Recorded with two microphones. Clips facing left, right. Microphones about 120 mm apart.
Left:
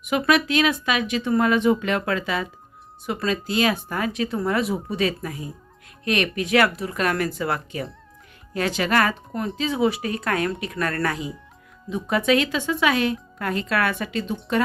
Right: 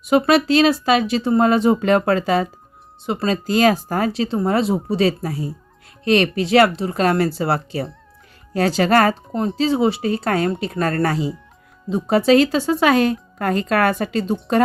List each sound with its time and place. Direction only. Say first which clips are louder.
0.0 s speech: right 5 dB; 30° right (ahead or behind)